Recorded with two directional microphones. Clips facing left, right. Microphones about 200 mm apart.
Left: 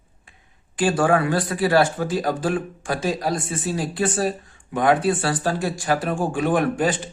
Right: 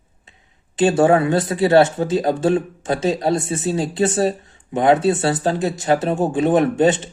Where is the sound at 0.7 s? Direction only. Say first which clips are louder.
Right 5 dB; 25° right (ahead or behind).